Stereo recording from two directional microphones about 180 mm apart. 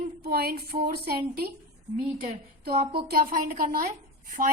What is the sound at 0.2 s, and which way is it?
Speech, 60° right (ahead or behind).